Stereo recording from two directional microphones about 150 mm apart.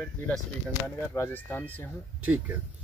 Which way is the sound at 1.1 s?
15° left (ahead or behind).